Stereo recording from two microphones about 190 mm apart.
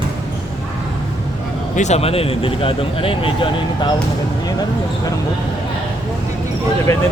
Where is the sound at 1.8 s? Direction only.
35° left (ahead or behind).